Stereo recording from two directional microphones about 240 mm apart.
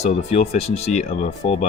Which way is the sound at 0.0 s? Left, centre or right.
Left.